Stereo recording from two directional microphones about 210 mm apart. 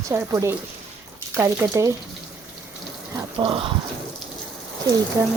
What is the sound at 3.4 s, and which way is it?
Speech, 25° right (ahead or behind).